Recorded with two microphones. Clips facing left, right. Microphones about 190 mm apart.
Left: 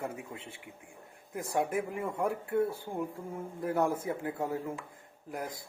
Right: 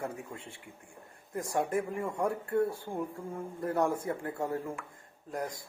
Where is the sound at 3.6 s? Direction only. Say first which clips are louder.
Even; 10° left (ahead or behind).